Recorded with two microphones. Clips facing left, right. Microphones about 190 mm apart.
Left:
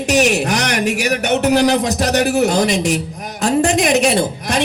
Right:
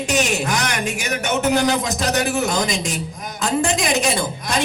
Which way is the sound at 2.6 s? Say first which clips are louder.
Left 7 dB; 70° left (ahead or behind).